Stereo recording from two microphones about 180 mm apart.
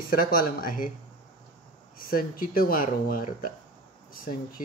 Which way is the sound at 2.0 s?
55° left (ahead or behind).